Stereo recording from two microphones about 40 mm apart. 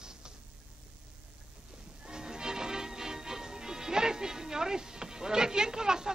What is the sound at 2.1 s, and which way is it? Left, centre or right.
Speech, centre.